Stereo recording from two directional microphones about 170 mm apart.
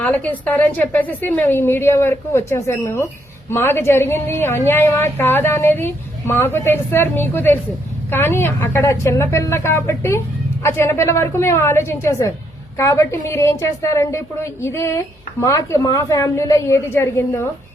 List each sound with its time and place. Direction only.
0.0 s a woman's voice: 10° left (ahead or behind)